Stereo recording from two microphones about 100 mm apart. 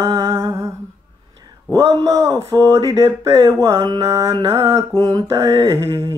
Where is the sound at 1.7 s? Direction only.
35° right (ahead or behind).